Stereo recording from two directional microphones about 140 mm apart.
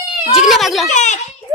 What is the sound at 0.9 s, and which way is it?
Speech, 60° left (ahead or behind).